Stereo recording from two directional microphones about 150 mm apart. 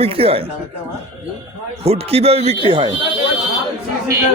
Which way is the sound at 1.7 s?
45° right (ahead or behind).